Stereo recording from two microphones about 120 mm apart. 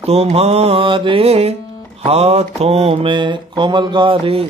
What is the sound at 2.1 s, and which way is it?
Speech, 60° right (ahead or behind).